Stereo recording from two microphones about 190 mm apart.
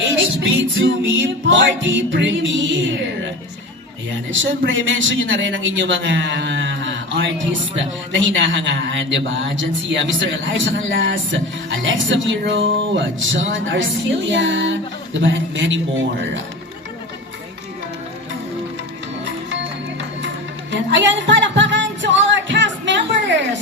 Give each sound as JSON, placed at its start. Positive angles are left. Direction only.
{"t": 0.4, "sound": "a man's voice", "side_deg": -80}
{"t": 4.3, "sound": "a man's voice", "side_deg": -85}
{"t": 19.5, "sound": "music", "side_deg": -70}